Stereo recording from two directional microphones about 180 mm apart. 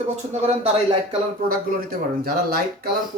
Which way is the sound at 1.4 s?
55° right (ahead or behind).